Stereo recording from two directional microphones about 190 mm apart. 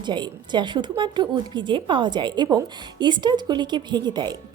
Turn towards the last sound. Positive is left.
turn(degrees=-20)  # may be behind; listen again after turning